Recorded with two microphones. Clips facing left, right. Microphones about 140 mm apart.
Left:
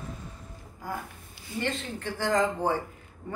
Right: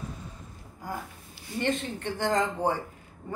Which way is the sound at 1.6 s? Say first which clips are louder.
Right 3 dB; 20° right (ahead or behind).